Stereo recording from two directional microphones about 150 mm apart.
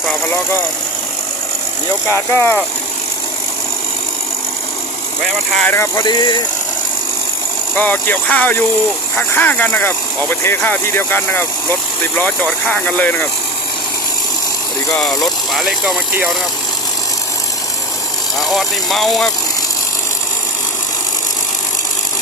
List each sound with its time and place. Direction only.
2.0 s speech: 15° left (ahead or behind)
5.5 s speech: 15° left (ahead or behind)
6.0 s speech: 30° left (ahead or behind)
7.8 s speech: 10° left (ahead or behind)
15.5 s speech: centre (ahead or behind)
18.3 s speech: centre (ahead or behind)